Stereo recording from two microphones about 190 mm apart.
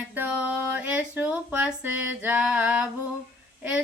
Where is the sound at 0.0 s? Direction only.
5° right (ahead or behind).